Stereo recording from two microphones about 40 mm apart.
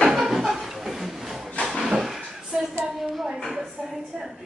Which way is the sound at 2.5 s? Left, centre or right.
Centre.